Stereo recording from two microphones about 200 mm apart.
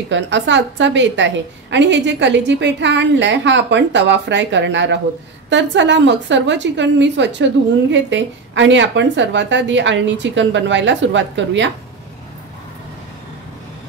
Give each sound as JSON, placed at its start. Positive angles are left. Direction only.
{"t": 0.1, "sound": "a woman's voice", "side_deg": -65}